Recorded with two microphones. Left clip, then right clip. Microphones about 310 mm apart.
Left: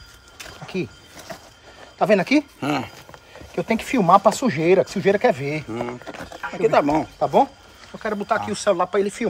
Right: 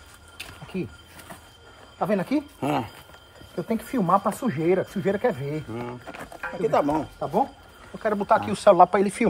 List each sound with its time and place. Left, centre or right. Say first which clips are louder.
0.7 s speech: left 5 dB; centre
2.0 s speech: left 8 dB; left
8.0 s speech: right 2 dB; centre
8.5 s speech: right 4 dB; centre